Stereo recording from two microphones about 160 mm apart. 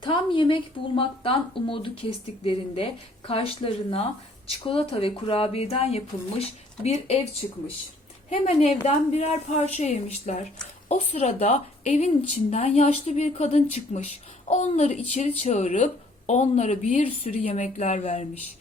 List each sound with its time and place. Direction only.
0.0 s speech: 30° left (ahead or behind)
8.4 s speech: 45° left (ahead or behind)